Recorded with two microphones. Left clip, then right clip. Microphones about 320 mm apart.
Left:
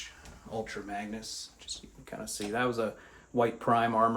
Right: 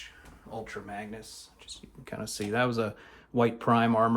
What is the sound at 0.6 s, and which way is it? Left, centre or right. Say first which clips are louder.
Speech: left 1 dB; centre.